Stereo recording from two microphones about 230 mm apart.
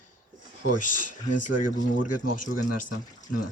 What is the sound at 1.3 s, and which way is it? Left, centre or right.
Speech, left.